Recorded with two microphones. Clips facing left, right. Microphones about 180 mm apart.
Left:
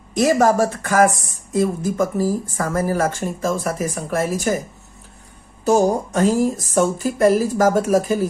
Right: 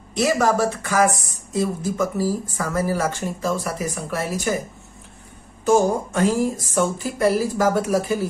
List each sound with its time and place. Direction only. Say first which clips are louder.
0.1 s speech: left 4 dB; 45° left (ahead or behind)
5.7 s speech: left 1 dB; 40° left (ahead or behind)